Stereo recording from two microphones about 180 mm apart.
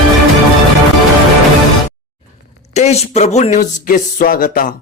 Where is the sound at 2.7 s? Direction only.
35° left (ahead or behind).